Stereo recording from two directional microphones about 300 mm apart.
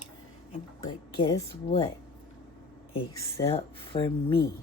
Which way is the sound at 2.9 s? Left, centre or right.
Centre.